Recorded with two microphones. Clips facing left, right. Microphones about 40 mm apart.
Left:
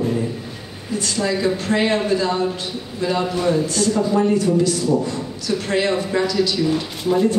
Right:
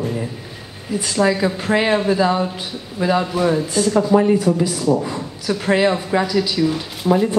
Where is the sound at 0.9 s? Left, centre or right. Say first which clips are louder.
Right 4 dB; centre.